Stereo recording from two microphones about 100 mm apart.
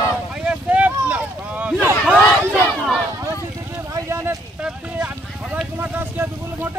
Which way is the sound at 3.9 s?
25° right (ahead or behind).